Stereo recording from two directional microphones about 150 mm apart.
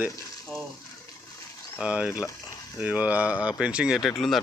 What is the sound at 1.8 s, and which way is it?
Speech, 5° right (ahead or behind).